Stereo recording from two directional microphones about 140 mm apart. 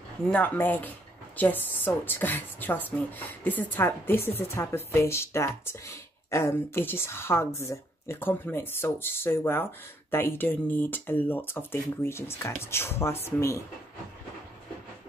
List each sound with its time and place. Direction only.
0.3 s speech: 10° left (ahead or behind)